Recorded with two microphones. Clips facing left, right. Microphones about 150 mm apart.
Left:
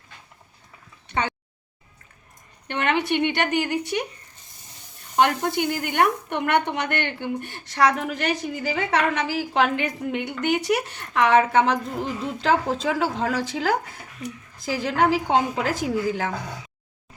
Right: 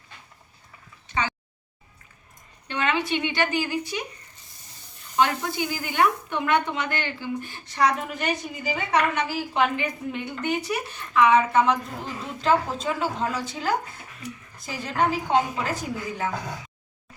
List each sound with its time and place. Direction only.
2.6 s a woman's voice: 60° left (ahead or behind)
5.1 s a woman's voice: 60° left (ahead or behind); by 16.3 s 90° left